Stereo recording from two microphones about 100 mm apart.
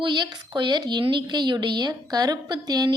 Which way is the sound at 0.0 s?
50° right (ahead or behind).